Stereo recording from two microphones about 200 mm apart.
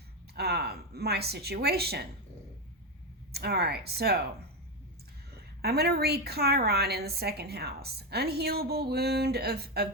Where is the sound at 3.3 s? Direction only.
55° right (ahead or behind).